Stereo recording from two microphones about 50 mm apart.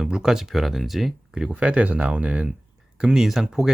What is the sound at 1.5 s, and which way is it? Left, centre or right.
Speech, right.